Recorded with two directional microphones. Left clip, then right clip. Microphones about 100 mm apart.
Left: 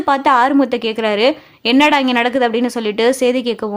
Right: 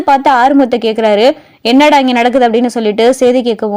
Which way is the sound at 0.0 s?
30° right (ahead or behind).